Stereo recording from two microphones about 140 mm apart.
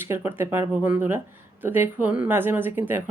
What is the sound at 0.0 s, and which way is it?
Speech, 15° right (ahead or behind).